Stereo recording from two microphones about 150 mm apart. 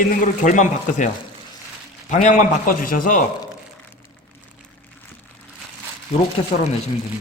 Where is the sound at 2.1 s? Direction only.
55° left (ahead or behind).